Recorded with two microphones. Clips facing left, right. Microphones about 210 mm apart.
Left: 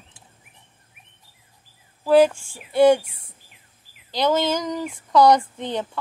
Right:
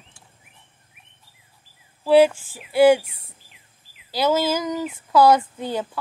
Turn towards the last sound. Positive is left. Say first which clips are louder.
# right 1 dB
turn(degrees=-5)  # may be behind; listen again after turning